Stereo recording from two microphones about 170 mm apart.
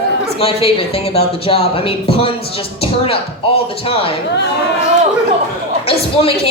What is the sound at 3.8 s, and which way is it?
Speech, 35° left (ahead or behind).